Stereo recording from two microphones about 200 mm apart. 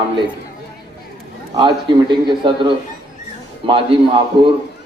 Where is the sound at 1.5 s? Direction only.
25° right (ahead or behind).